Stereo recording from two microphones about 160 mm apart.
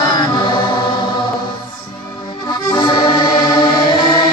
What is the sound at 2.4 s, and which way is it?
Accordion, 25° left (ahead or behind).